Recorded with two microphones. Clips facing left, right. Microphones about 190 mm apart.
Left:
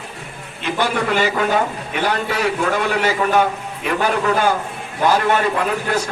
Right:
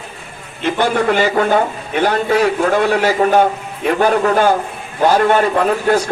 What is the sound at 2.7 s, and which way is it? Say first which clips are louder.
A man's voice: right 5 dB; 50° right (ahead or behind).